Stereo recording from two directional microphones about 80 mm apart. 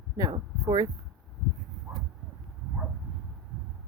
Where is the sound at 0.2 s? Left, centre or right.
Right.